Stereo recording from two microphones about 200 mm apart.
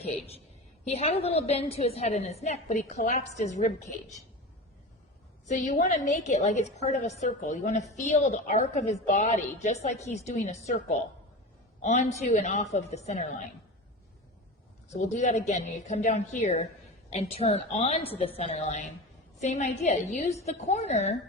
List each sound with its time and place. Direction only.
0.0 s a woman's voice: 30° left (ahead or behind)
5.5 s a woman's voice: 40° left (ahead or behind)
11.8 s a woman's voice: 35° left (ahead or behind)
14.8 s a woman's voice: 35° left (ahead or behind)